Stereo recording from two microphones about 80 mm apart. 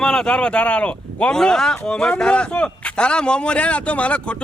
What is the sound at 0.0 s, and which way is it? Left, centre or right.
A man's voice, centre.